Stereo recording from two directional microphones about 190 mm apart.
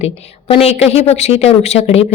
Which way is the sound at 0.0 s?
30° left (ahead or behind).